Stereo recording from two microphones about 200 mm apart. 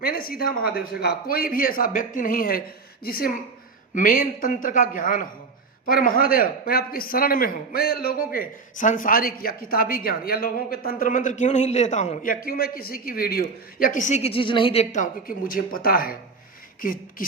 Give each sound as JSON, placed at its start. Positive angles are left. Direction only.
{"t": 0.0, "sound": "a man's voice", "side_deg": 45}